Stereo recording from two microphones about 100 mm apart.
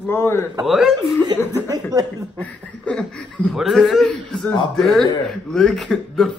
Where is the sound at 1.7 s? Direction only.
40° right (ahead or behind).